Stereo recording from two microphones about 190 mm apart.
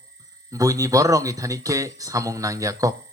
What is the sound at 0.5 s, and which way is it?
A man's voice, 15° right (ahead or behind).